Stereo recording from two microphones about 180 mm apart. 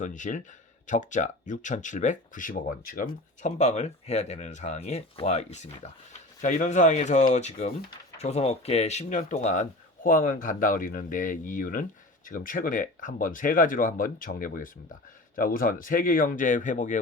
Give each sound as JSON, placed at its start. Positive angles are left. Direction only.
{"t": 0.0, "sound": "speech", "side_deg": 45}